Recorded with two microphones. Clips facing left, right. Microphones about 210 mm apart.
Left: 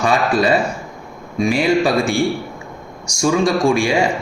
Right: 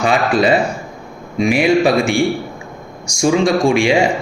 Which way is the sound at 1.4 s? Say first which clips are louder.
Right 2 dB; 20° right (ahead or behind).